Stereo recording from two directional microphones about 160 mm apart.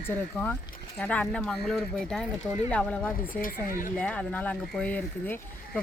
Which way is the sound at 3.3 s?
60° left (ahead or behind).